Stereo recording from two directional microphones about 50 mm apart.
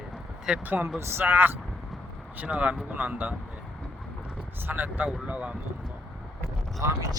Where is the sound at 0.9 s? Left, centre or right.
Right.